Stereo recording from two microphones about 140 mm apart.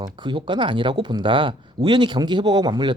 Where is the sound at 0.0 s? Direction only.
35° right (ahead or behind).